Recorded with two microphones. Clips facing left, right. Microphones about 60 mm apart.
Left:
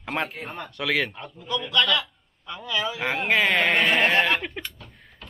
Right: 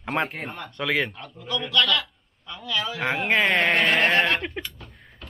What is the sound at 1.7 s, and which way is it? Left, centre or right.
A man's voice, centre.